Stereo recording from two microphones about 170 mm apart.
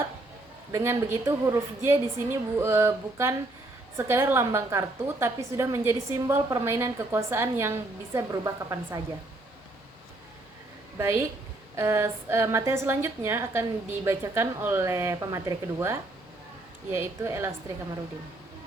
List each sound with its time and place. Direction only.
0.7 s a woman's voice: 15° right (ahead or behind)
10.9 s a woman's voice: 15° right (ahead or behind)